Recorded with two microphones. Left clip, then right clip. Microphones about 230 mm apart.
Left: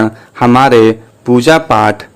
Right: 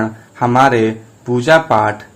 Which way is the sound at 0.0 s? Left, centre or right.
Left.